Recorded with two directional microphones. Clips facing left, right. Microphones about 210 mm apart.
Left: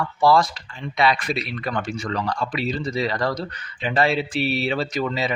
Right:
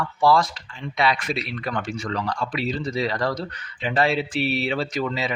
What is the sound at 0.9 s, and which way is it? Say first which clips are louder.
Speech: left 2 dB; 35° left (ahead or behind).